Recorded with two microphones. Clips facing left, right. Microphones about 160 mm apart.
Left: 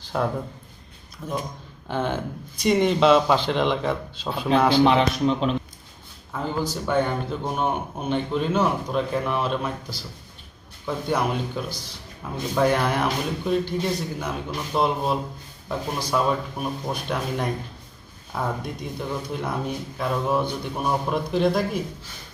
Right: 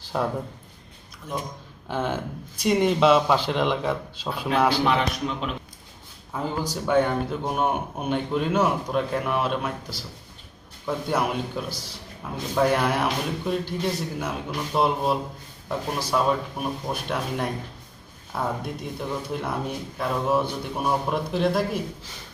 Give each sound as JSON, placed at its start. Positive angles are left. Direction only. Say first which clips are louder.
{"t": 0.1, "sound": "speech", "louder": "left 1 dB", "side_deg": 0}
{"t": 1.9, "sound": "a man's voice", "louder": "left 1 dB", "side_deg": -5}
{"t": 4.8, "sound": "speech", "louder": "left 5 dB", "side_deg": 25}
{"t": 6.3, "sound": "a man's voice", "louder": "left 1 dB", "side_deg": -10}
{"t": 10.8, "sound": "speech", "louder": "left 1 dB", "side_deg": -5}